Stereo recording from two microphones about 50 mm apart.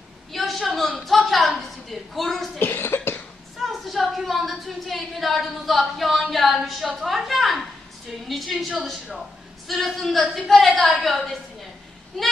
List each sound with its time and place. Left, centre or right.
0.3 s a woman's voice: centre
2.6 s cough: left
3.5 s a woman's voice: centre